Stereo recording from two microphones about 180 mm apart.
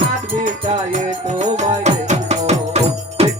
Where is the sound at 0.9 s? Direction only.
40° right (ahead or behind).